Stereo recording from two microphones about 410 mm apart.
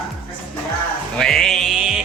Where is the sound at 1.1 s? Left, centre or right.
Centre.